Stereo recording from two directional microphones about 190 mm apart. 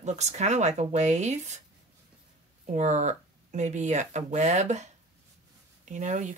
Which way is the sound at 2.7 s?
40° right (ahead or behind).